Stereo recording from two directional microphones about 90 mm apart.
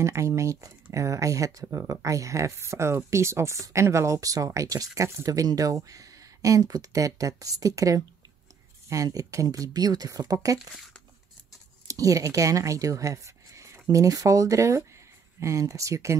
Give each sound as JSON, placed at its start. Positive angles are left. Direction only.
{"t": 0.0, "sound": "speech", "side_deg": -35}
{"t": 11.9, "sound": "speech", "side_deg": -40}